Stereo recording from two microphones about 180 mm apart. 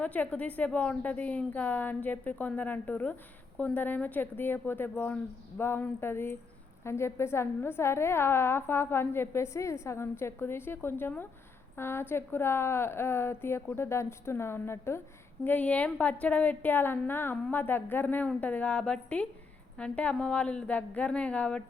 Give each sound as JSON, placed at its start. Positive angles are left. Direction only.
{"t": 0.0, "sound": "a woman's voice", "side_deg": 10}